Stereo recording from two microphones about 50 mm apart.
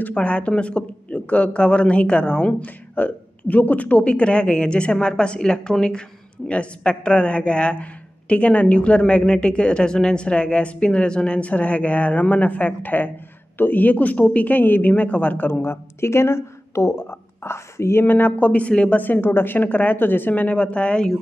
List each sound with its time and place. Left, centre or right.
0.1 s a woman's voice: left
2.6 s a woman's voice: left
15.6 s speech: left
17.1 s a sound: left
18.0 s speech: left
18.5 s a woman's voice: left
18.9 s speech: left
20.4 s a woman's voice: left